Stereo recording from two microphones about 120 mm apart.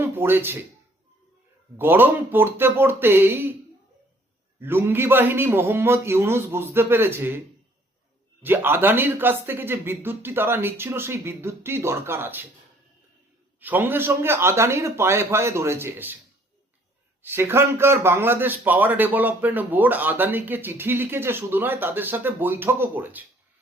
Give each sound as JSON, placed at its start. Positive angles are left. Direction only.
{"t": 0.0, "sound": "speech", "side_deg": -20}
{"t": 1.7, "sound": "a man's voice", "side_deg": -15}
{"t": 4.6, "sound": "speech", "side_deg": -20}
{"t": 13.6, "sound": "speech", "side_deg": -15}
{"t": 17.2, "sound": "a man's voice", "side_deg": -20}